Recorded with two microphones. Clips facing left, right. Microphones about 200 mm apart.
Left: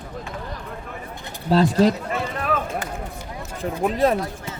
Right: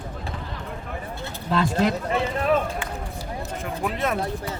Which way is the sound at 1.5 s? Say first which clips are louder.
Left 5 dB; 35° left (ahead or behind).